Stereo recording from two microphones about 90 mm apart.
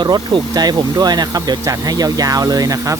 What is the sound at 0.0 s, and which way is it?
Speech, 55° right (ahead or behind).